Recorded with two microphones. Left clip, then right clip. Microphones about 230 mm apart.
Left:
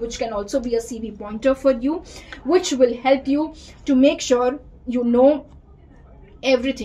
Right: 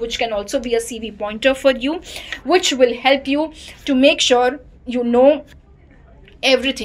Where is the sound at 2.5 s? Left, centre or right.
Right.